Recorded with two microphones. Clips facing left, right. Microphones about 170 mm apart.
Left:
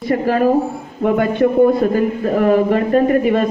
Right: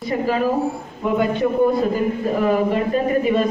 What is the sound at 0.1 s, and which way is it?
A woman's voice, 55° left (ahead or behind).